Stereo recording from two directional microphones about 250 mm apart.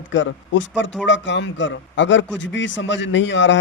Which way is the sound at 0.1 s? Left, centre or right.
Left.